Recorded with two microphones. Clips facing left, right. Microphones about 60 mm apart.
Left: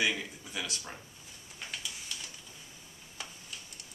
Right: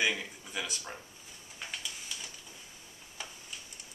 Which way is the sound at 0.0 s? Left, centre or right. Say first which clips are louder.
Even; centre.